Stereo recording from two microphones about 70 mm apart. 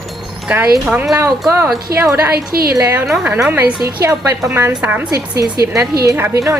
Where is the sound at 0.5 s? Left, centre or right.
Centre.